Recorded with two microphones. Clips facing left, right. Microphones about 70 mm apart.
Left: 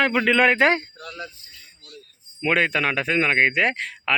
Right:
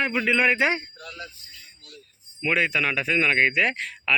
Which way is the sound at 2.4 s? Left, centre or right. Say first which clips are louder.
Left 3 dB; left.